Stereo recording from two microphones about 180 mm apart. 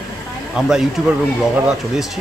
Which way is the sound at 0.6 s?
Centre (ahead or behind).